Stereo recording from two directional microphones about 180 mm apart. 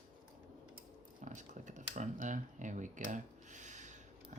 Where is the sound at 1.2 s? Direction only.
45° right (ahead or behind).